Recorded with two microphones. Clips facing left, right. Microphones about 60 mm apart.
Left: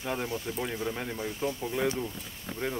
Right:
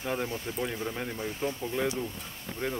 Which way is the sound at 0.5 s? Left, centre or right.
Centre.